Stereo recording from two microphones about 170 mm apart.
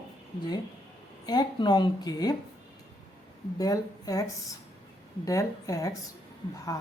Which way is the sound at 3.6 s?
20° left (ahead or behind).